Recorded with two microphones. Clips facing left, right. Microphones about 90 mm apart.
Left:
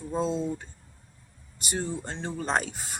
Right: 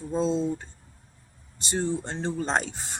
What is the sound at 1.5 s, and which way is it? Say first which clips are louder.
A woman's voice: right 4 dB; 25° right (ahead or behind).